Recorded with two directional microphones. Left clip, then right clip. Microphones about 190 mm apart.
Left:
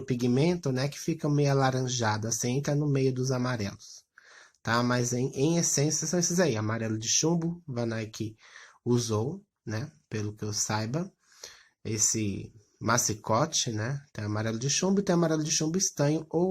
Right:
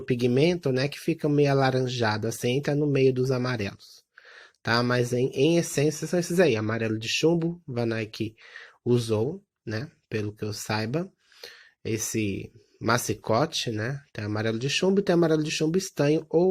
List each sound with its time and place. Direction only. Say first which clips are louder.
0.1 s speech: right 5 dB; 20° right (ahead or behind)